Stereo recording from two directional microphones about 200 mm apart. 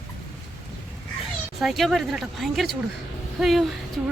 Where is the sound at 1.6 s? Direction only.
Centre (ahead or behind).